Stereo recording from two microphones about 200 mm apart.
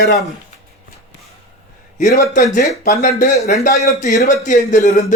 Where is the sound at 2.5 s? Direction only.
40° left (ahead or behind).